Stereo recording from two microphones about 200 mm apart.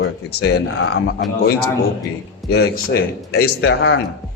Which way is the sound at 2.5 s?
55° left (ahead or behind).